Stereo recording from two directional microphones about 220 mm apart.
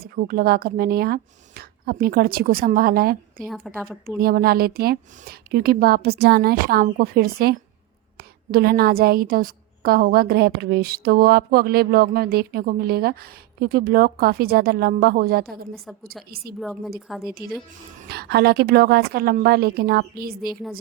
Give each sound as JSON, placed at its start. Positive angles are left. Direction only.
{"t": 0.0, "sound": "a woman's voice", "side_deg": -40}
{"t": 3.4, "sound": "a woman's voice", "side_deg": 0}
{"t": 4.2, "sound": "a woman's voice", "side_deg": -45}
{"t": 16.6, "sound": "a woman's voice", "side_deg": 0}
{"t": 18.1, "sound": "a woman's voice", "side_deg": -45}